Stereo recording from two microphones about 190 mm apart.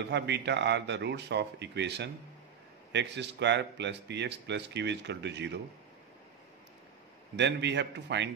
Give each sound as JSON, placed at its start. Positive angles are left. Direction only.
{"t": 0.1, "sound": "speech", "side_deg": -65}
{"t": 7.3, "sound": "a man's voice", "side_deg": -65}